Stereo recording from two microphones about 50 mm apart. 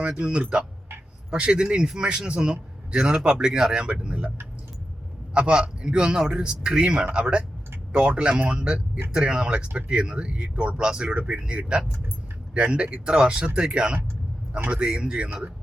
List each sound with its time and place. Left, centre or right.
0.1 s a man's voice: centre
5.3 s a man's voice: centre